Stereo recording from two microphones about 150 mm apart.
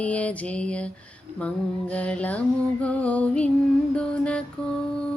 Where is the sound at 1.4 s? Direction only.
10° left (ahead or behind).